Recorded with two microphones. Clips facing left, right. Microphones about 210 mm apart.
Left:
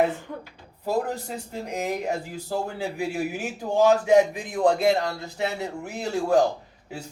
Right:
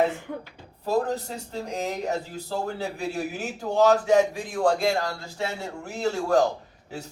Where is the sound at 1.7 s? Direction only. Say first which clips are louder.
Left 1 dB; 15° left (ahead or behind).